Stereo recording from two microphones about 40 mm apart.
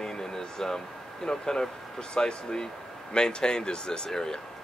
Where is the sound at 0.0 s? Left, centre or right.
Centre.